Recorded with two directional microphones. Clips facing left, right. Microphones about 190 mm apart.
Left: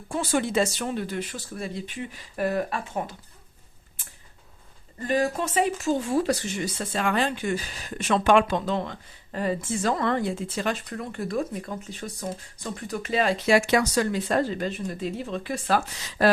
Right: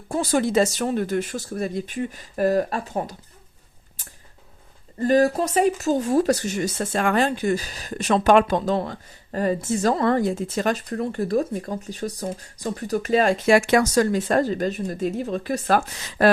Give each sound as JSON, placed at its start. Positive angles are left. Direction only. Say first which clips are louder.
{"t": 0.1, "sound": "speech", "louder": "right 4 dB", "side_deg": -40}
{"t": 4.9, "sound": "speech", "louder": "right 7 dB", "side_deg": -40}